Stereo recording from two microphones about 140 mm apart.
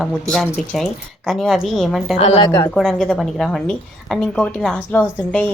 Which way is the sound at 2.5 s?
20° left (ahead or behind).